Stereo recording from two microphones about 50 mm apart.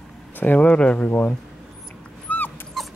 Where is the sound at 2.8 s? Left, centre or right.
Centre.